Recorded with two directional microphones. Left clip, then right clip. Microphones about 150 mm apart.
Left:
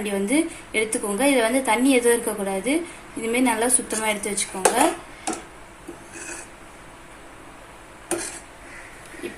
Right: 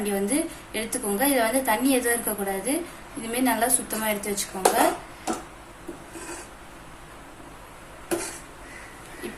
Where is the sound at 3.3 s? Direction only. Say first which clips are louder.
Left 3 dB; 45° left (ahead or behind).